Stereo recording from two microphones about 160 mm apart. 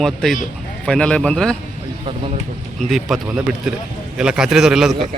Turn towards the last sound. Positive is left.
turn(degrees=0)  # may be behind; listen again after turning